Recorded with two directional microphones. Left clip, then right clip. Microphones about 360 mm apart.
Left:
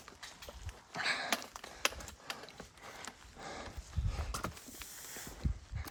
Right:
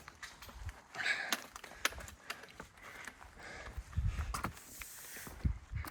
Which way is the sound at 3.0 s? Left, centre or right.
Centre.